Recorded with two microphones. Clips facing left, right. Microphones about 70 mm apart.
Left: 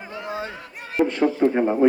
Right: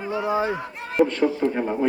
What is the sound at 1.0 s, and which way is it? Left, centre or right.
Speech, centre.